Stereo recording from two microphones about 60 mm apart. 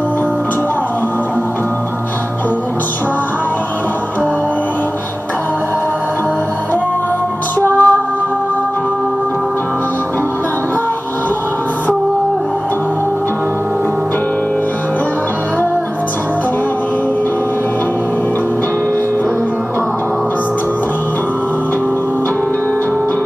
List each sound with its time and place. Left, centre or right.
7.6 s music: left